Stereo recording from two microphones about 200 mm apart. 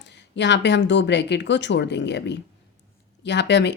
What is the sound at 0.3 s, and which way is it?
A woman's voice, 60° left (ahead or behind).